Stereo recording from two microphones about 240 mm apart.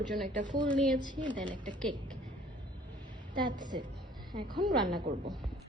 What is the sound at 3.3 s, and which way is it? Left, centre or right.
Speech, centre.